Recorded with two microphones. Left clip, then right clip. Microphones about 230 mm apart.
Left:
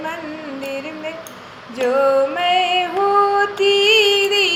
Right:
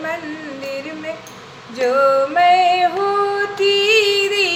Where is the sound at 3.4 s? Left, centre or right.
Centre.